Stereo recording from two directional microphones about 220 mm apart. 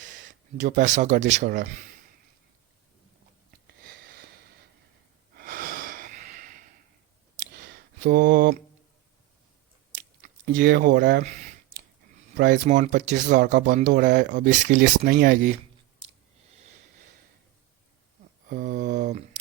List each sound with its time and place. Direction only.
0.5 s speech: 35° right (ahead or behind)
5.4 s wheeze: 40° right (ahead or behind)
8.0 s speech: 45° right (ahead or behind)
10.2 s biting: 35° right (ahead or behind)
10.6 s speech: 45° right (ahead or behind)
12.6 s speech: 35° right (ahead or behind)
14.8 s speech: 45° right (ahead or behind)
18.4 s a sound: 40° right (ahead or behind)